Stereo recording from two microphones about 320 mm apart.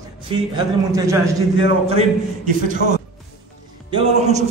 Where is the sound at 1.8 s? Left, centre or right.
Right.